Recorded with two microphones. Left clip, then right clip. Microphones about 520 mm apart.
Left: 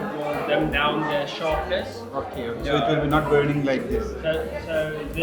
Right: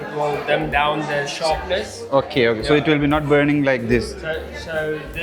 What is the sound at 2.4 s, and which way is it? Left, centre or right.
Speech, right.